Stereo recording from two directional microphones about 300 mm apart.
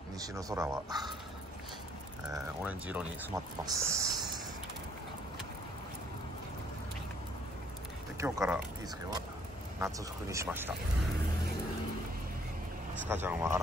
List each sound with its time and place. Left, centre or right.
0.3 s speech: centre
2.3 s speech: centre
8.2 s speech: centre
13.1 s speech: centre